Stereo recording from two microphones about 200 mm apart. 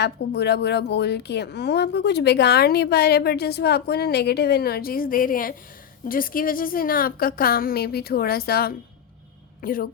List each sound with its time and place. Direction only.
0.0 s a woman's voice: 55° left (ahead or behind)